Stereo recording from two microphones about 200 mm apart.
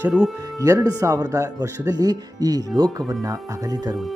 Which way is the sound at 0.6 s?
15° right (ahead or behind).